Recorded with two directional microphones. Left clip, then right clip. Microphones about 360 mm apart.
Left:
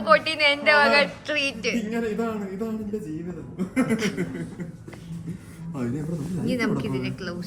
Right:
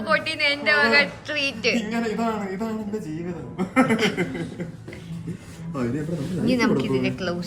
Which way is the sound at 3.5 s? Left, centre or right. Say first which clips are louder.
Right 5 dB; centre.